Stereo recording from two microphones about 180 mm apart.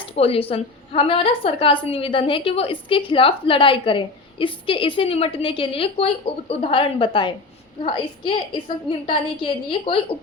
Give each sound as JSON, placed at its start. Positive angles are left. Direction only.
{"t": 0.2, "sound": "a woman's voice", "side_deg": 30}